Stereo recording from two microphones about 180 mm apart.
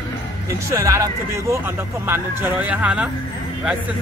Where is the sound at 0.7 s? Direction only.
15° right (ahead or behind).